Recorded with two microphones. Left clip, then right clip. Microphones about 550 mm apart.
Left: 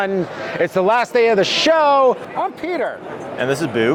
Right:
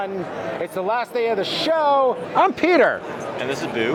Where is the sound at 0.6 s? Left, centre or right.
Left.